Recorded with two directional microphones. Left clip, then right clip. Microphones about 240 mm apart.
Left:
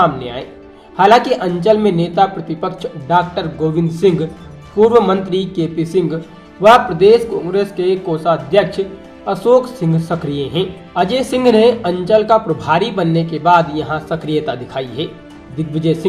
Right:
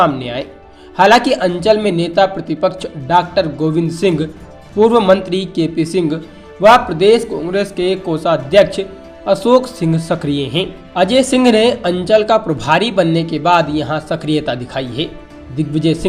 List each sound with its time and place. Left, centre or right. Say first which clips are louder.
0.0 s speech: right 1 dB; right